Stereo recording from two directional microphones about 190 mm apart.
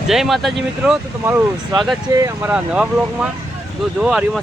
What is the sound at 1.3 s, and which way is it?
Speech, 20° right (ahead or behind).